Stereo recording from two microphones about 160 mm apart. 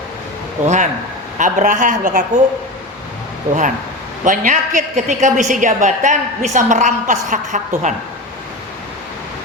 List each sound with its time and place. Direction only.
0.6 s a woman's voice: 50° right (ahead or behind)
4.2 s a woman's voice: 55° right (ahead or behind)